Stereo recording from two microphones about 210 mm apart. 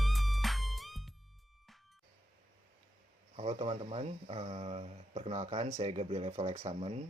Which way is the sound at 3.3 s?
30° right (ahead or behind).